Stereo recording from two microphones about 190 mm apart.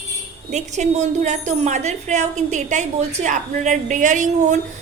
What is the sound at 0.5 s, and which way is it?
A woman's voice, 40° right (ahead or behind).